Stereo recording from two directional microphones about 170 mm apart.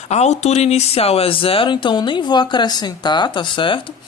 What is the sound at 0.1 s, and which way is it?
Speech, 40° left (ahead or behind).